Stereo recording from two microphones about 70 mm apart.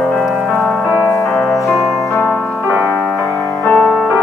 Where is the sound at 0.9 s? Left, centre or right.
Centre.